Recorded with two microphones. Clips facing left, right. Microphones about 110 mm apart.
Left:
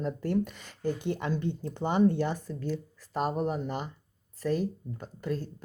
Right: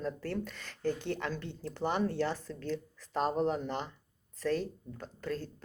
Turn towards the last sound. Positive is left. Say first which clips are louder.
# left 4 dB
turn(degrees=15)  # may be behind; listen again after turning